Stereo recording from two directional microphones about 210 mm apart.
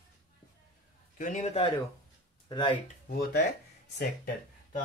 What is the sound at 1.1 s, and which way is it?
Speech, 35° left (ahead or behind).